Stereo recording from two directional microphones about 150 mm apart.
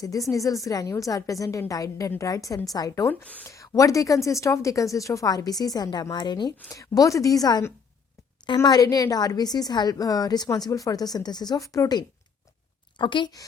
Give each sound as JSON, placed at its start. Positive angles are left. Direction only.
{"t": 0.0, "sound": "a woman's voice", "side_deg": 20}